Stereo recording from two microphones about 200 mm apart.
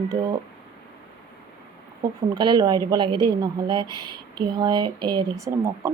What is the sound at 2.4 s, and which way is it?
Speech, 20° right (ahead or behind).